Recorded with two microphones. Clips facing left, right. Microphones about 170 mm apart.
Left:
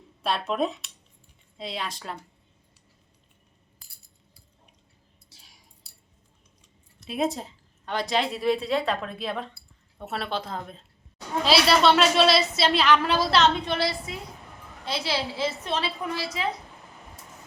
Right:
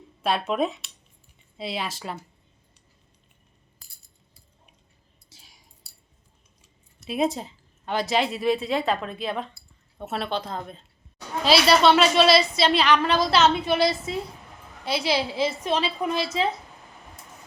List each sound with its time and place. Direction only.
0.2 s a woman's voice: centre (ahead or behind)
5.3 s a sound: centre (ahead or behind)
7.0 s a woman's voice: centre (ahead or behind)
14.1 s a woman's voice: 30° right (ahead or behind)
14.8 s a woman's voice: 10° right (ahead or behind)